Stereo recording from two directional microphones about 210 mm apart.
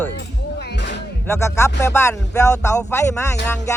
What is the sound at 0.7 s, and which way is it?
Music, 55° left (ahead or behind).